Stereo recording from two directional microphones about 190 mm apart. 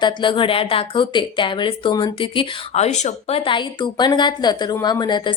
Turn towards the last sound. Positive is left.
turn(degrees=25)  # may be behind; listen again after turning